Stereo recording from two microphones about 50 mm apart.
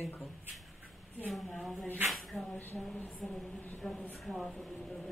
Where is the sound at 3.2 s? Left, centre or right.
Centre.